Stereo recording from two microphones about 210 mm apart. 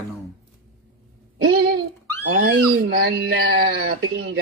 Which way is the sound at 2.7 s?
50° right (ahead or behind).